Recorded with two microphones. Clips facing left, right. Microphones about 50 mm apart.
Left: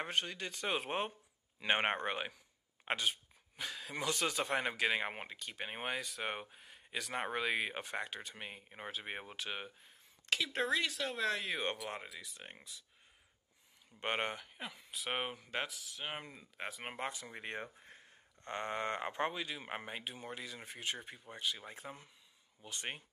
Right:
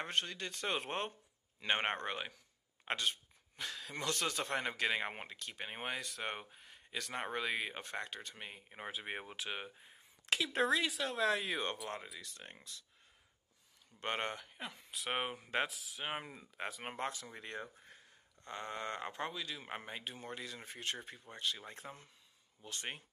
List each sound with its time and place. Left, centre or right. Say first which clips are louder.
0.0 s speech: left 1 dB; centre
13.9 s speech: left 2 dB; centre
14.3 s speech: even; centre
17.1 s speech: left 2 dB; left
17.8 s speech: left 2 dB; left
19.9 s speech: left 1 dB; centre